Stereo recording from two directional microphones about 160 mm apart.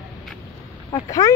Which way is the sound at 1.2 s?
20° left (ahead or behind).